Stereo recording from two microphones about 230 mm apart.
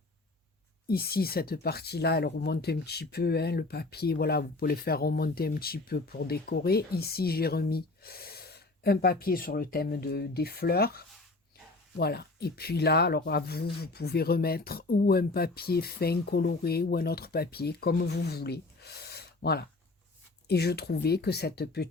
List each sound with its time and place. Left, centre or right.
0.9 s speech: left